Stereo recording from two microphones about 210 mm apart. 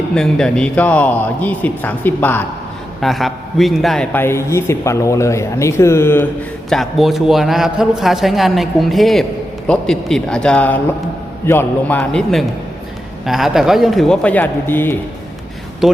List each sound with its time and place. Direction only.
0.1 s a man's voice: 5° left (ahead or behind)
6.7 s a man's voice: centre (ahead or behind)
15.8 s a man's voice: centre (ahead or behind)